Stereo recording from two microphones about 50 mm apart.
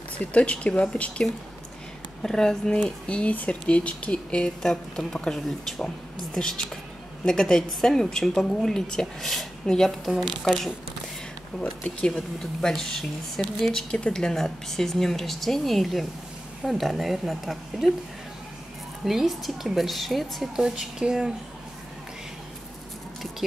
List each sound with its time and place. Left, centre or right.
0.2 s speech: left
2.2 s speech: centre
2.8 s a woman's voice: left; by 17.9 s centre
19.0 s a woman's voice: centre
20.5 s speech: centre